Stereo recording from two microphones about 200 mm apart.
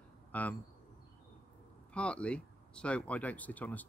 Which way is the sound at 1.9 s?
5° left (ahead or behind).